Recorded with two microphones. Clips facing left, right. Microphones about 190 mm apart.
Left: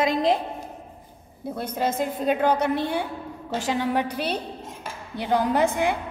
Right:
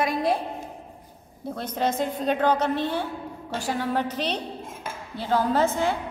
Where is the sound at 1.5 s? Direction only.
10° left (ahead or behind).